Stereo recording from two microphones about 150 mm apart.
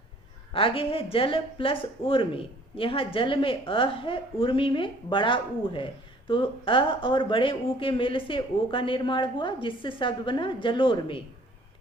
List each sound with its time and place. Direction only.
0.5 s speech: 35° left (ahead or behind)